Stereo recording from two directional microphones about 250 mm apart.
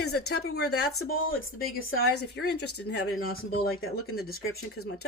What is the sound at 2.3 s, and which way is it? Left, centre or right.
Speech, left.